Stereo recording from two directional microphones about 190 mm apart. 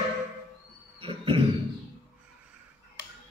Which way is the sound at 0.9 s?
30° right (ahead or behind).